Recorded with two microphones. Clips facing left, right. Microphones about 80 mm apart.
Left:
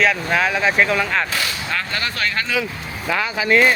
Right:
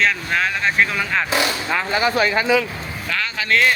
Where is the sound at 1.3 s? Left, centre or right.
Centre.